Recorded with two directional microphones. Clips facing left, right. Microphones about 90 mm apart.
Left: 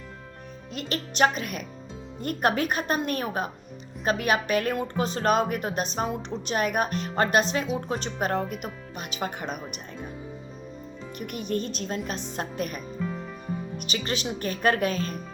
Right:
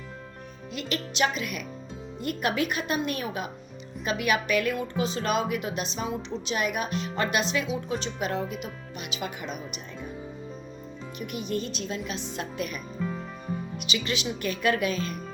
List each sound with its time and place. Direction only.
0.7 s a woman's voice: 40° left (ahead or behind)
11.2 s a woman's voice: 45° left (ahead or behind)